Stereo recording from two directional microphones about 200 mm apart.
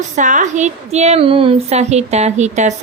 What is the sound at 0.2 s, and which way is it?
Female singing, 40° right (ahead or behind).